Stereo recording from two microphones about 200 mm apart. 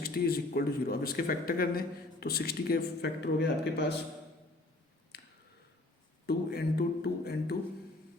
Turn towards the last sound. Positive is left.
turn(degrees=55)  # may be behind; listen again after turning